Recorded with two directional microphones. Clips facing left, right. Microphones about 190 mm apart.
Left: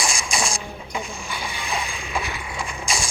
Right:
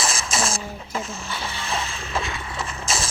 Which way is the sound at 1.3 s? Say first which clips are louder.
Even; 15° left (ahead or behind).